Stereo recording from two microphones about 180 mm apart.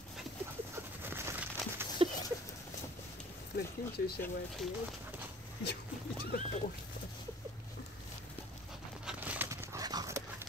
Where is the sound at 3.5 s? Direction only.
60° left (ahead or behind).